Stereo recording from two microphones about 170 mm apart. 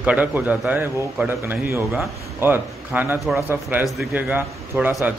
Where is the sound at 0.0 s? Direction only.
10° right (ahead or behind).